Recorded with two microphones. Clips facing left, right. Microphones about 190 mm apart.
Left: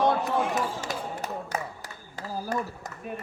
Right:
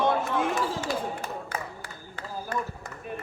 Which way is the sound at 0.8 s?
40° left (ahead or behind).